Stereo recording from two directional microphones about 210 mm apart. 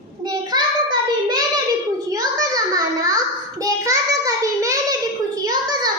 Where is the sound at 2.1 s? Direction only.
15° right (ahead or behind).